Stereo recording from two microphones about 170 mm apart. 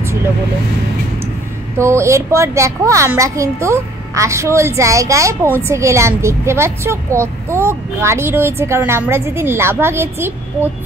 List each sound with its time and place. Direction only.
1.8 s speech: 15° right (ahead or behind)